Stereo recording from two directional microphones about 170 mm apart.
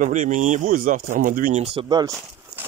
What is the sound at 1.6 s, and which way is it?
Speech, 35° right (ahead or behind).